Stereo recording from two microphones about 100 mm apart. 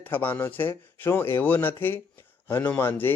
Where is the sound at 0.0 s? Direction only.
20° left (ahead or behind).